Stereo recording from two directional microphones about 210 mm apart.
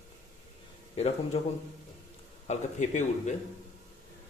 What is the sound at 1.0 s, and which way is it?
Speech, 30° left (ahead or behind).